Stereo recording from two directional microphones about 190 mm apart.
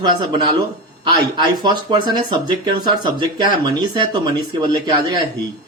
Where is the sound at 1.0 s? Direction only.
25° right (ahead or behind).